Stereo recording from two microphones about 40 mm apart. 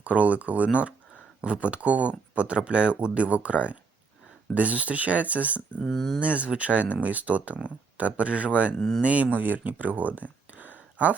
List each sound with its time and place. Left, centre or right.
0.0 s speech: right
5.9 s speech: centre
6.1 s speech: right
9.4 s speech: right